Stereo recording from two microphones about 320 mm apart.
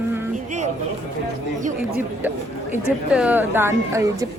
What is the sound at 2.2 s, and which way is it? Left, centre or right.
A woman's voice, centre.